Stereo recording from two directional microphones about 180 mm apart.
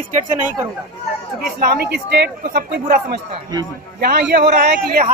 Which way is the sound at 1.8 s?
70° right (ahead or behind).